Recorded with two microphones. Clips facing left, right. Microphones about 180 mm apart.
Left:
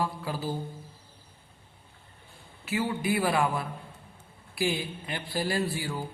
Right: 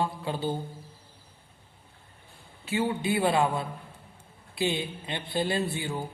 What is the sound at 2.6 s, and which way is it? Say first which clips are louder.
A man's voice: right 1 dB; 25° right (ahead or behind).